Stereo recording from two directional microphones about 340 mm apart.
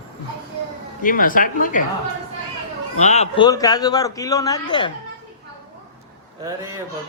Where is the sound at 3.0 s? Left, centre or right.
Centre.